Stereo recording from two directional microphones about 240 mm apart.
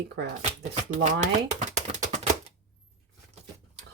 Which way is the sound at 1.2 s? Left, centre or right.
Right.